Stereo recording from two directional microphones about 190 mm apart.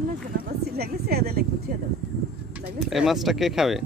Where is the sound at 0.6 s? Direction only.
55° right (ahead or behind).